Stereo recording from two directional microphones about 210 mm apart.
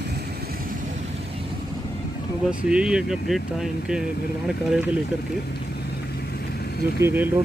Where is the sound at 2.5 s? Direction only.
5° right (ahead or behind).